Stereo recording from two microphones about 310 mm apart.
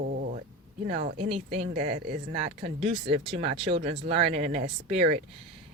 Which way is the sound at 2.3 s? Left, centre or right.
Centre.